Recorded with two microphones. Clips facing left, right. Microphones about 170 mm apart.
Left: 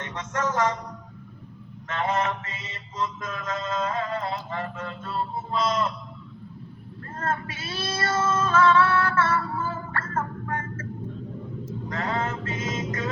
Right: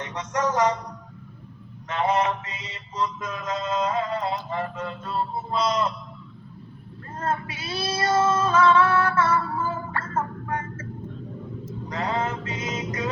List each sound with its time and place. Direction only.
0.0 s speech: 15° right (ahead or behind)
1.9 s mantra: 15° right (ahead or behind)
7.2 s mantra: 15° right (ahead or behind)
9.9 s a sound: 15° right (ahead or behind)
11.9 s music: 15° right (ahead or behind)